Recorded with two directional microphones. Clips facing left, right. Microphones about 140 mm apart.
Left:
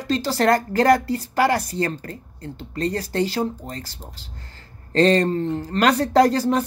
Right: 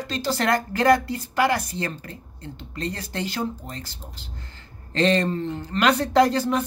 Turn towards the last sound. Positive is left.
turn(degrees=35)  # may be behind; listen again after turning